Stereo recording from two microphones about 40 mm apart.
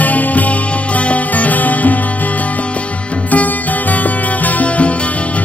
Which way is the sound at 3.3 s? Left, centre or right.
Left.